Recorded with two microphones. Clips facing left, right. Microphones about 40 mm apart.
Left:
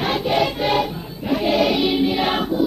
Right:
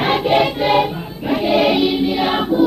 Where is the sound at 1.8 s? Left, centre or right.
Centre.